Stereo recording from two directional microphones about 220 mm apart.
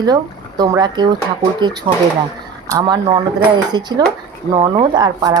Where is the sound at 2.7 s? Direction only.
20° right (ahead or behind).